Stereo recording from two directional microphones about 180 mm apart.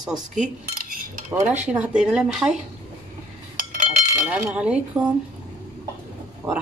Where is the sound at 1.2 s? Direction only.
10° right (ahead or behind).